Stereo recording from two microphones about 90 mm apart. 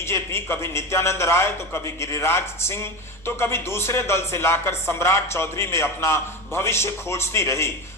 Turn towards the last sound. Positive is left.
turn(degrees=30)  # may be behind; listen again after turning